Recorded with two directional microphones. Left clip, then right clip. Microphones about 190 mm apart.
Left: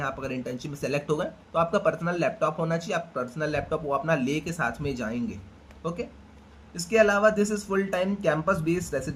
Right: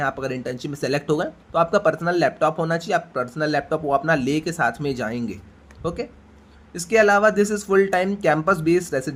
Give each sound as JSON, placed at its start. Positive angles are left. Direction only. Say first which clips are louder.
{"t": 0.0, "sound": "speech", "louder": "right 7 dB", "side_deg": -40}
{"t": 6.7, "sound": "speech", "louder": "right 5 dB", "side_deg": -40}